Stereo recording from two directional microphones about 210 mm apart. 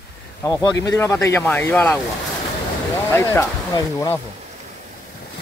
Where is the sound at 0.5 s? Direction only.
15° left (ahead or behind).